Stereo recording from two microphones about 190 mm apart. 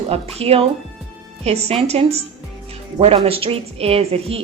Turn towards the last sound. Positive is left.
turn(degrees=-30)  # may be behind; listen again after turning